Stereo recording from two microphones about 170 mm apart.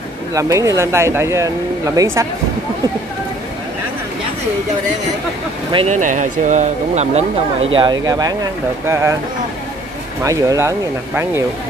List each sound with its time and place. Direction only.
0.3 s speech: 20° right (ahead or behind)
5.9 s speech: 45° right (ahead or behind); by 9.1 s 15° right (ahead or behind)
10.2 s speech: 20° right (ahead or behind)